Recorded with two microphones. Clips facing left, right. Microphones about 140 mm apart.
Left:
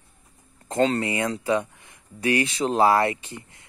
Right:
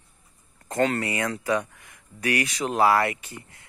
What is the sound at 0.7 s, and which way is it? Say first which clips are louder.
Speech: left 2 dB; 25° left (ahead or behind).